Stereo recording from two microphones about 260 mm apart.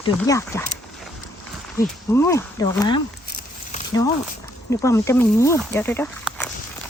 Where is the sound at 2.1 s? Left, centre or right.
Centre.